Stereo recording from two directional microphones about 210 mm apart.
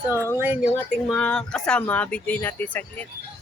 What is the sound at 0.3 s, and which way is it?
Speech, 10° right (ahead or behind).